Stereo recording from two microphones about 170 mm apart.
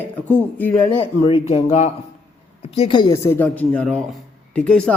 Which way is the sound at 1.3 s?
35° left (ahead or behind).